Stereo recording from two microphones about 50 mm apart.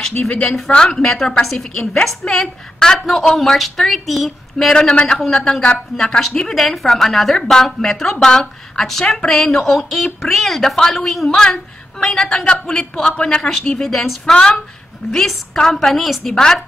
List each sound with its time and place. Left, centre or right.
0.7 s a woman's voice: centre
4.7 s a woman's voice: centre
6.5 s a woman's voice: centre